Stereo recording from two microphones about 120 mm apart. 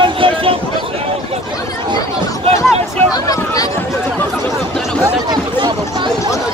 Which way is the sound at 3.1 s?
30° left (ahead or behind).